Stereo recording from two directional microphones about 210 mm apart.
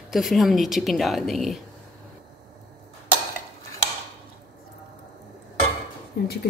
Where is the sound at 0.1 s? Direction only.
Centre (ahead or behind).